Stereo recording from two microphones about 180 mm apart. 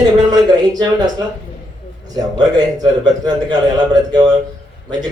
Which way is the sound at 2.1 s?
20° right (ahead or behind).